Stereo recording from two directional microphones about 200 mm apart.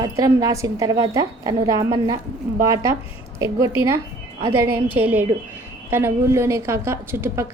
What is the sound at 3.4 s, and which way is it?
A woman's voice, 15° right (ahead or behind).